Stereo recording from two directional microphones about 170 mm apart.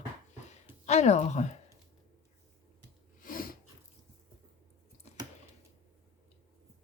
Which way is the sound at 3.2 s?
55° left (ahead or behind).